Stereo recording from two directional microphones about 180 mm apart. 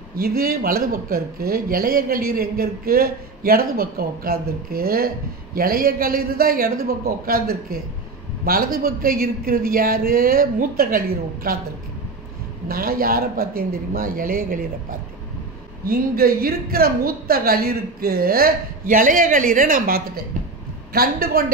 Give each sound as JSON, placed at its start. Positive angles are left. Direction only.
{"t": 0.2, "sound": "speech", "side_deg": -55}
{"t": 12.6, "sound": "speech", "side_deg": -55}
{"t": 15.8, "sound": "speech", "side_deg": -55}